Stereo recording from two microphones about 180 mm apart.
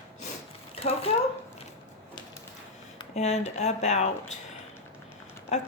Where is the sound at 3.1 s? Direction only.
40° left (ahead or behind).